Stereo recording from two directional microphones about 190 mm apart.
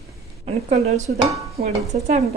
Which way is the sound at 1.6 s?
35° right (ahead or behind).